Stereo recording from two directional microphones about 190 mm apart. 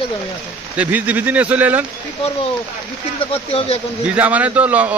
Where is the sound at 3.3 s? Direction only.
30° left (ahead or behind).